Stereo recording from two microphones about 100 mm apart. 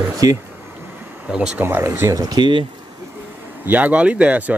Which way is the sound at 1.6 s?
25° right (ahead or behind).